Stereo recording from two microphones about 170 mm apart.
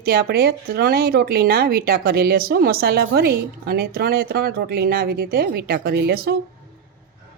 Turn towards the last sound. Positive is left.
turn(degrees=-65)  # may be behind; listen again after turning